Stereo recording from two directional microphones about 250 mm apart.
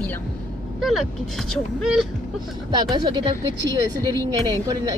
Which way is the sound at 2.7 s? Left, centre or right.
Centre.